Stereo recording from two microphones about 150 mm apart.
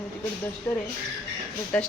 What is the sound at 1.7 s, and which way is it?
Speech, 10° left (ahead or behind).